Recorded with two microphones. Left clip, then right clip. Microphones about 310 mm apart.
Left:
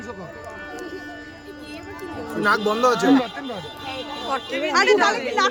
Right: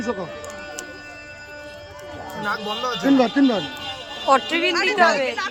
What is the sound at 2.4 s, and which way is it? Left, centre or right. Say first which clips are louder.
Speech: left 7 dB; left.